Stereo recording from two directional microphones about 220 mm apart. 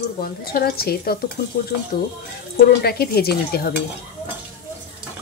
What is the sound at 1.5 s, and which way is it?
Stir, 40° left (ahead or behind).